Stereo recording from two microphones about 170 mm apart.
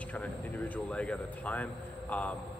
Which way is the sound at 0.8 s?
5° left (ahead or behind).